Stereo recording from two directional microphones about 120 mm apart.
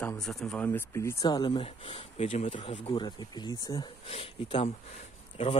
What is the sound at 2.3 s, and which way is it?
Speech, 80° left.